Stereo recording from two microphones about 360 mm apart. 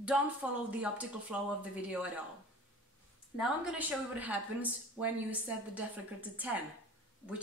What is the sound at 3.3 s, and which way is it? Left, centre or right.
A woman's voice, centre.